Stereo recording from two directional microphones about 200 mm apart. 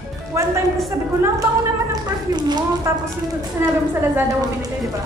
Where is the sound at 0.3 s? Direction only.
15° right (ahead or behind).